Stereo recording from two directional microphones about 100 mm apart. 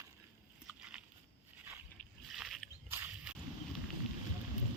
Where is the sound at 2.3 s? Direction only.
Centre (ahead or behind).